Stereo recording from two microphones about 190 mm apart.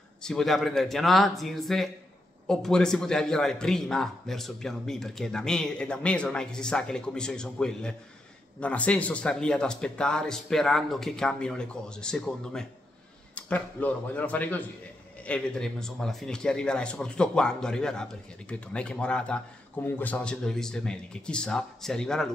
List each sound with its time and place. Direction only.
0.2 s speech: 5° left (ahead or behind)